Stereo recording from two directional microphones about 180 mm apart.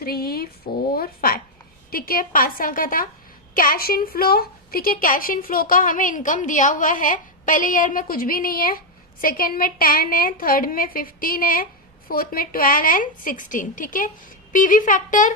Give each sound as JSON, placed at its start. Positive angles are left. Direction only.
{"t": 0.0, "sound": "a woman's voice", "side_deg": 55}